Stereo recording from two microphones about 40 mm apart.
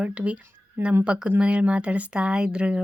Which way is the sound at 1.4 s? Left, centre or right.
Right.